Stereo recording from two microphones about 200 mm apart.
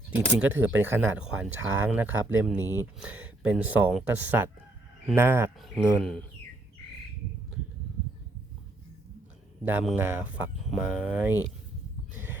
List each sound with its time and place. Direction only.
0.3 s speech: 10° right (ahead or behind)
2.6 s speech: 15° left (ahead or behind)
3.0 s speech: 5° right (ahead or behind)
5.5 s speech: centre (ahead or behind)
9.6 s speech: 10° right (ahead or behind)
12.1 s a sound: 10° right (ahead or behind)